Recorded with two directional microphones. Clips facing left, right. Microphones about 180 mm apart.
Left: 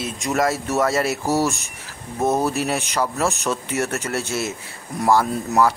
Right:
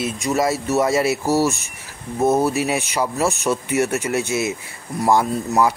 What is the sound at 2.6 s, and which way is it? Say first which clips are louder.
Speech: right 1 dB; 15° right (ahead or behind).